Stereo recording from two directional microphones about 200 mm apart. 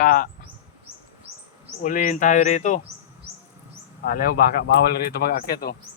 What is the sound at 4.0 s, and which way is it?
Speech, 45° left (ahead or behind).